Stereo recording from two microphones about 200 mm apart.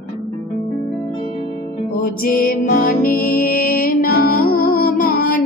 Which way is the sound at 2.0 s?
45° left (ahead or behind).